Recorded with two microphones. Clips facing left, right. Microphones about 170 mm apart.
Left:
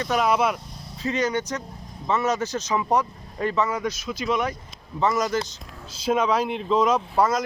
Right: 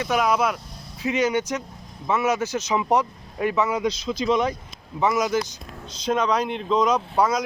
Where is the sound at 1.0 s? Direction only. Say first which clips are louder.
Right 2 dB; 10° right (ahead or behind).